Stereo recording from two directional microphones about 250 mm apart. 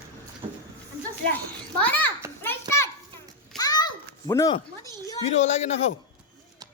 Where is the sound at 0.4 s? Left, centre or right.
Right.